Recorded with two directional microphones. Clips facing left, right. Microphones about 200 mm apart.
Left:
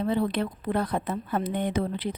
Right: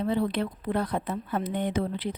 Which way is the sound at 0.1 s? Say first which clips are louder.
Left 1 dB; 50° left (ahead or behind).